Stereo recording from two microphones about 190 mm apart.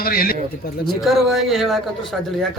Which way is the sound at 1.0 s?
Centre (ahead or behind).